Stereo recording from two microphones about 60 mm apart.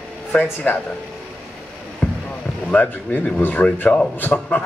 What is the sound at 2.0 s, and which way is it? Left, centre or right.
Boat, left.